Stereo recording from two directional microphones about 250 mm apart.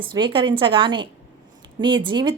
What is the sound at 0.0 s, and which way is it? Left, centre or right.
Speech, centre.